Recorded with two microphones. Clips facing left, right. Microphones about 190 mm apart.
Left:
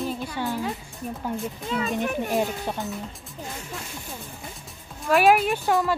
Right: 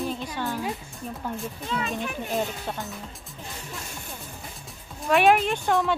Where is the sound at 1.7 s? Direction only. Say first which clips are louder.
Left 3 dB; 25° left (ahead or behind).